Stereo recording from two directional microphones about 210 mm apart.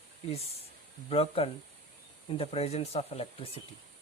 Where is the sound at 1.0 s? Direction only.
25° left (ahead or behind).